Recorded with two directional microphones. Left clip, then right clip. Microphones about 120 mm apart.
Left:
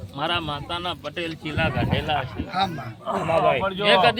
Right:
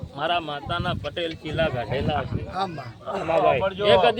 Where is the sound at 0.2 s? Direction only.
30° right (ahead or behind).